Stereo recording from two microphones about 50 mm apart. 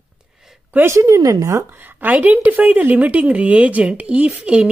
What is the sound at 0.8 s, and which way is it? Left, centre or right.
Speech, right.